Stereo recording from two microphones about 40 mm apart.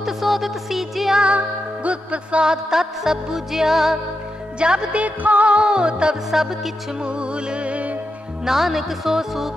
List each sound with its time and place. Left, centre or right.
0.0 s music: centre
1.2 s music: right
2.4 s music: centre
4.6 s music: right
4.9 s music: right
6.3 s music: centre
7.0 s music: right
8.5 s music: centre